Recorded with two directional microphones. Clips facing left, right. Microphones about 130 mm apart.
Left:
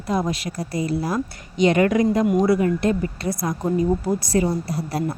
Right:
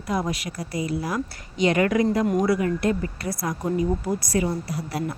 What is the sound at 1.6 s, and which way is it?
Speech, 25° left (ahead or behind).